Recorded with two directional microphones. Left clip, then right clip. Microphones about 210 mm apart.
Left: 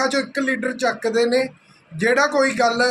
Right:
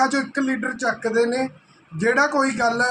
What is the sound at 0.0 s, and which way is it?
Speech, 5° right (ahead or behind).